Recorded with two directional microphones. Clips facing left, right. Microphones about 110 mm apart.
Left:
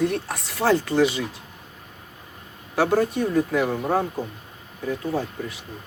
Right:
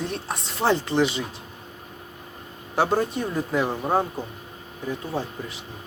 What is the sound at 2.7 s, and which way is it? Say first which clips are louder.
Speech: left 2 dB; 25° right (ahead or behind).